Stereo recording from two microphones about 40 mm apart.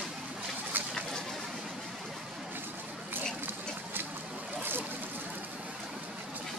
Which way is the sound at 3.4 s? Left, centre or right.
Right.